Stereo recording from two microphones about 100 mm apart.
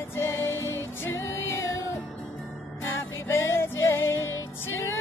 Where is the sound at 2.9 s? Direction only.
25° left (ahead or behind).